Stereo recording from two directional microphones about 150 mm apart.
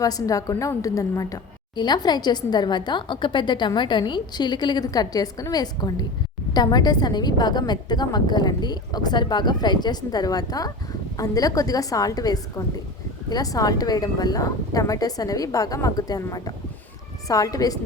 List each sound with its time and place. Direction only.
0.0 s a woman's voice: 25° left (ahead or behind)